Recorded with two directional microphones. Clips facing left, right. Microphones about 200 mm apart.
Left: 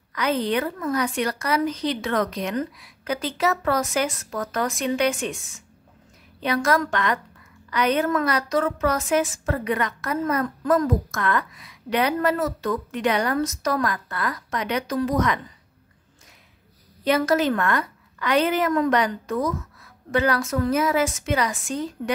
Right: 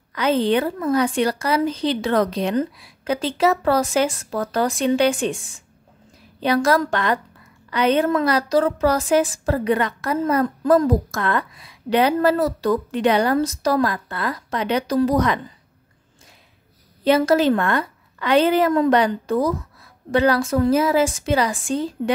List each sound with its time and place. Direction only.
0.1 s a woman's voice: 30° right (ahead or behind)
17.0 s a woman's voice: 30° right (ahead or behind)